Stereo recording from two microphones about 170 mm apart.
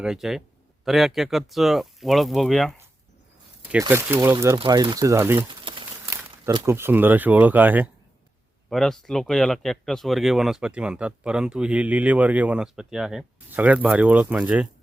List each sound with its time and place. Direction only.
0.0 s speech: centre (ahead or behind)
3.7 s speech: 10° right (ahead or behind)
5.5 s a sound: 30° right (ahead or behind)
6.7 s speech: 15° right (ahead or behind)
8.7 s speech: centre (ahead or behind)